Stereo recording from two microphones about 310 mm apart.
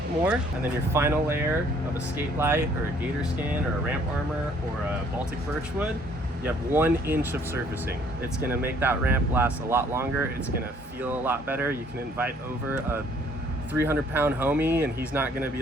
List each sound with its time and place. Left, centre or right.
0.3 s speech: centre
6.4 s speech: centre